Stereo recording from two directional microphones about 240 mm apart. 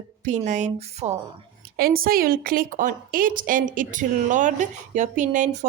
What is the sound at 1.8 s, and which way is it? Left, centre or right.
A woman's voice, right.